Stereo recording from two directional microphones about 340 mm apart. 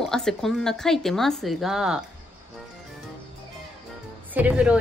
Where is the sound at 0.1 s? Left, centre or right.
Centre.